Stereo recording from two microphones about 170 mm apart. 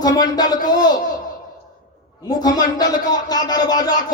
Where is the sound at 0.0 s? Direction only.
25° left (ahead or behind).